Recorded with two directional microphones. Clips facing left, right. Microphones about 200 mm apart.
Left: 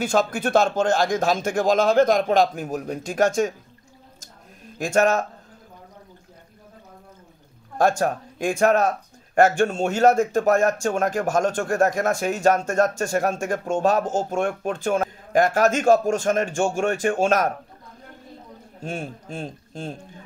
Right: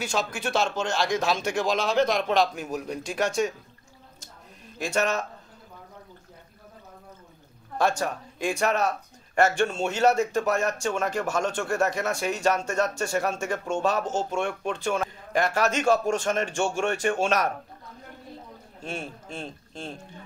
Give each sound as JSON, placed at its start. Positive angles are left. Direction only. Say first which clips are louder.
{"t": 0.0, "sound": "speech", "louder": "left 7 dB", "side_deg": 55}
{"t": 4.7, "sound": "speech", "louder": "left 6 dB", "side_deg": 45}
{"t": 8.0, "sound": "speech", "louder": "left 5 dB", "side_deg": 50}
{"t": 18.9, "sound": "speech", "louder": "left 4 dB", "side_deg": 45}